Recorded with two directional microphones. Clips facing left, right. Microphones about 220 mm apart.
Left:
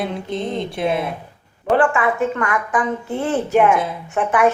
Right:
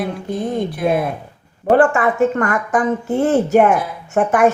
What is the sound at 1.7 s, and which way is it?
A woman's voice, 45° right (ahead or behind).